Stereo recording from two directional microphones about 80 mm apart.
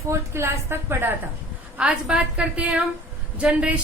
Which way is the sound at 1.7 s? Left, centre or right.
Centre.